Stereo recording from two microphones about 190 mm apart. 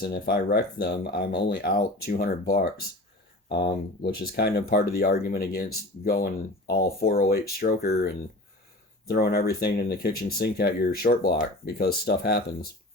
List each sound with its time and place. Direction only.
0.0 s speech: 55° left (ahead or behind)